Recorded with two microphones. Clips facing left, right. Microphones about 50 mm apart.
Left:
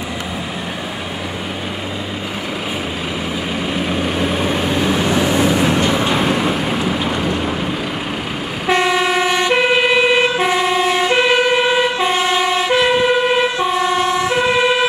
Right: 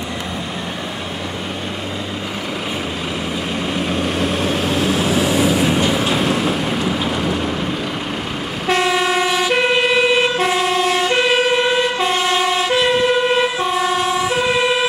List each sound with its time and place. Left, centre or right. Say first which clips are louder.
3.9 s vehicle: left 1 dB; centre
8.6 s vehicle: left 1 dB; centre
9.4 s emergency vehicle: left 2 dB; centre